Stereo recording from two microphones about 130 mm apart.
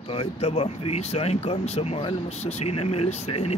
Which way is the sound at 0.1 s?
50° left (ahead or behind).